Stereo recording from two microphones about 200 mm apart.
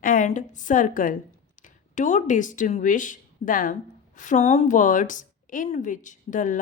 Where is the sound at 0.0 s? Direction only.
45° left (ahead or behind).